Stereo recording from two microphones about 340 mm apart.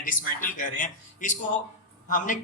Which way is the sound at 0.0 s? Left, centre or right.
Left.